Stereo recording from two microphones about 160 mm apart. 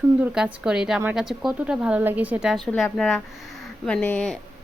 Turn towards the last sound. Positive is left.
turn(degrees=5)  # may be behind; listen again after turning